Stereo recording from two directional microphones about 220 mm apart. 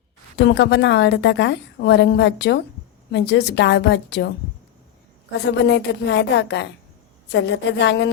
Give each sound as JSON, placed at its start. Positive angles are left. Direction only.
{"t": 0.3, "sound": "a woman's voice", "side_deg": 50}
{"t": 5.5, "sound": "a woman's voice", "side_deg": 50}